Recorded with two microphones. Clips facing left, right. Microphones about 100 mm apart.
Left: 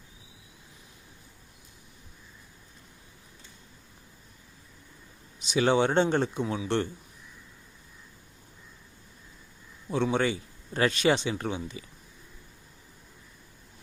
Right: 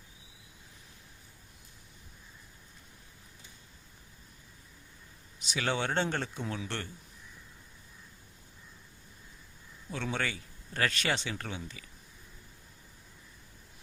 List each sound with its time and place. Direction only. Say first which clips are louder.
5.5 s speech: left 9 dB; 20° left (ahead or behind)
9.9 s speech: left 9 dB; 20° left (ahead or behind)